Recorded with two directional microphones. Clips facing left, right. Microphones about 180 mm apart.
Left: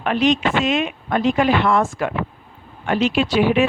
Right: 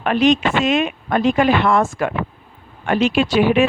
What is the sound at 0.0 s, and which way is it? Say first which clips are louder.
Speech: right 2 dB; 50° right (ahead or behind).